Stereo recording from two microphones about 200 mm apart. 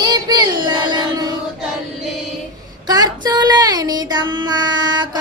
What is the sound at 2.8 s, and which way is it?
Child singing, 20° right (ahead or behind).